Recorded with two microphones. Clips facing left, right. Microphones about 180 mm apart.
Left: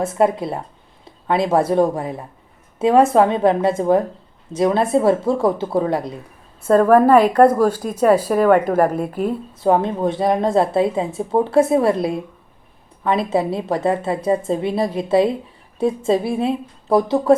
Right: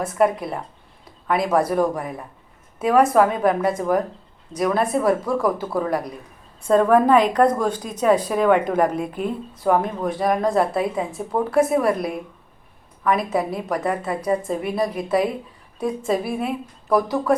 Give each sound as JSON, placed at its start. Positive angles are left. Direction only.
{"t": 0.0, "sound": "a woman's voice", "side_deg": 25}
{"t": 6.6, "sound": "a woman's voice", "side_deg": 5}
{"t": 9.6, "sound": "a woman's voice", "side_deg": 25}